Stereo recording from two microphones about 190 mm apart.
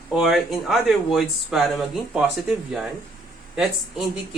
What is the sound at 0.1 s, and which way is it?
Speech, centre (ahead or behind).